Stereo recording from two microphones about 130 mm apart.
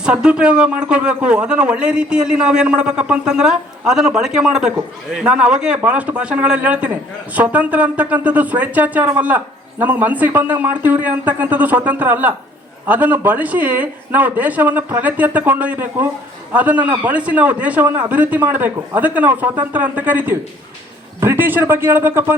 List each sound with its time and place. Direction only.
0.0 s speech: 5° right (ahead or behind)